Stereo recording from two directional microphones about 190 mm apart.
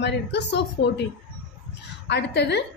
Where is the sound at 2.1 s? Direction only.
65° left (ahead or behind).